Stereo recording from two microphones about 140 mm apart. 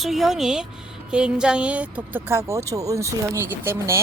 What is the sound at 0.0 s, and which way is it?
Speech, centre (ahead or behind).